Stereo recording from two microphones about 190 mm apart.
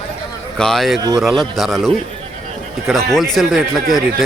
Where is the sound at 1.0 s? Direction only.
20° right (ahead or behind).